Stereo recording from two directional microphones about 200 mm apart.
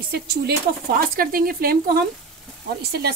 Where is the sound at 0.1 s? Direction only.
50° right (ahead or behind).